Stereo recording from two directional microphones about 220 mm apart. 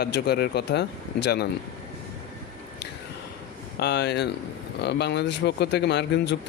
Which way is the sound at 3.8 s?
50° left (ahead or behind).